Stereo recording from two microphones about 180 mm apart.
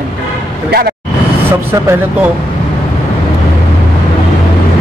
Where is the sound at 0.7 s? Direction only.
60° right (ahead or behind).